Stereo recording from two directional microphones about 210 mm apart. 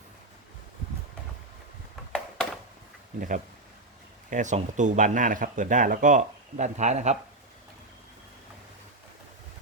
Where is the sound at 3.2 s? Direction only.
40° right (ahead or behind).